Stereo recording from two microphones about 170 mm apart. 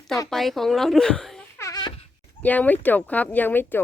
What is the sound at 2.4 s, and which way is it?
Speech, 10° left (ahead or behind).